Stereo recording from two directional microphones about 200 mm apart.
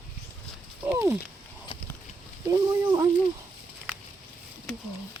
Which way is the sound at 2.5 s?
15° right (ahead or behind).